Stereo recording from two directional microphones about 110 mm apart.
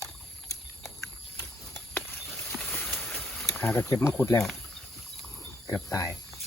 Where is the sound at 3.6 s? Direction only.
20° left (ahead or behind).